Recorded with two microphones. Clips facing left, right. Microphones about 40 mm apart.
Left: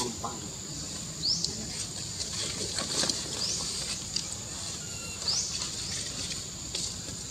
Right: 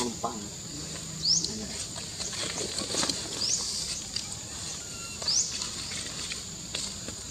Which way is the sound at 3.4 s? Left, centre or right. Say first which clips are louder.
Right 1 dB; centre.